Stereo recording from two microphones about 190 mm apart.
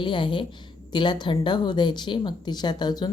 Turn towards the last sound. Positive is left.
turn(degrees=20)  # may be behind; listen again after turning